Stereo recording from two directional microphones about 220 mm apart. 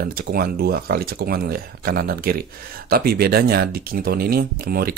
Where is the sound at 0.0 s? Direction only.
40° right (ahead or behind).